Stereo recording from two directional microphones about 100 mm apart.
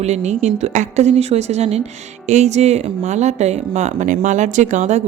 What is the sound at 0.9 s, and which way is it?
Speech, 90° right.